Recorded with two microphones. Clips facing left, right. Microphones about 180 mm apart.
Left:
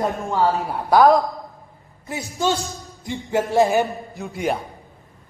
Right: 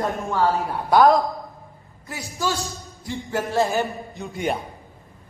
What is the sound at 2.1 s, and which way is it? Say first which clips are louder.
Speech: left 4 dB; 20° left (ahead or behind).